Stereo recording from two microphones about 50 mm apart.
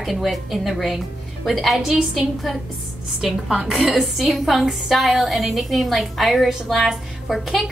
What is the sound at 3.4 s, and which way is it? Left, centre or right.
Speech, centre.